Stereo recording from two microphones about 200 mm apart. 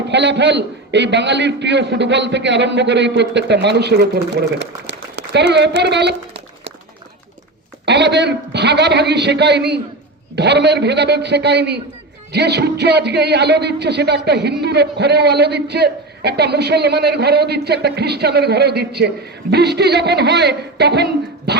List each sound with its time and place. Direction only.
0.1 s a man's voice: 60° right (ahead or behind)
7.9 s a man's voice: 60° right (ahead or behind)